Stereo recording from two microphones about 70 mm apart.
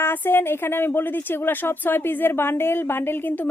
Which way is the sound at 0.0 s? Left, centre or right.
Left.